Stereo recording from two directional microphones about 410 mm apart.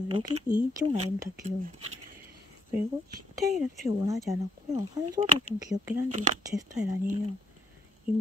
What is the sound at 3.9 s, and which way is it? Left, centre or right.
Speech, centre.